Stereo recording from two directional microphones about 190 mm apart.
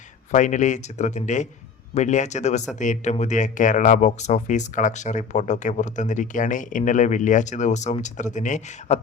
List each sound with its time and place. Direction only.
0.3 s speech: 40° left (ahead or behind)